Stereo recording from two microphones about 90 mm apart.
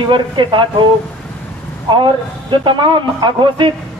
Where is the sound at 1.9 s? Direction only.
60° right (ahead or behind).